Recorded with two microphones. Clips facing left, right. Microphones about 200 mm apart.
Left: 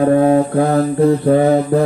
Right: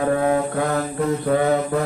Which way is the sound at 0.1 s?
30° left (ahead or behind).